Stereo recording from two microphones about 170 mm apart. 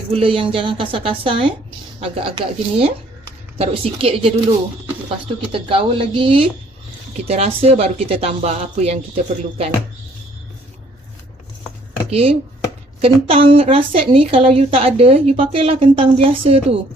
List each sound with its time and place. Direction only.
0.1 s a woman's voice: 35° right (ahead or behind)
3.6 s a woman's voice: 35° right (ahead or behind)
12.1 s a woman's voice: 35° right (ahead or behind)